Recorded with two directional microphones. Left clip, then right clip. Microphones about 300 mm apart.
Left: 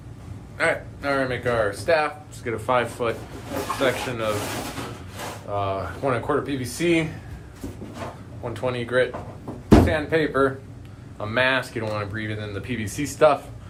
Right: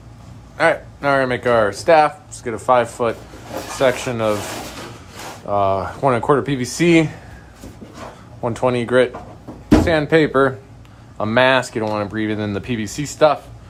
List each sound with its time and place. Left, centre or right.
0.5 s speech: centre
5.5 s speech: centre
8.4 s speech: centre